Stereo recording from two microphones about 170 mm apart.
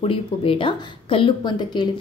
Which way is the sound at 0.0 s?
30° left (ahead or behind).